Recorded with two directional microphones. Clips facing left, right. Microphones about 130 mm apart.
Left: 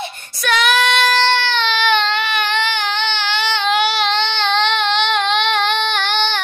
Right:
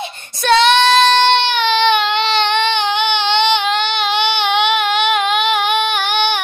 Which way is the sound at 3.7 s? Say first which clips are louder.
Left 1 dB; 5° left (ahead or behind).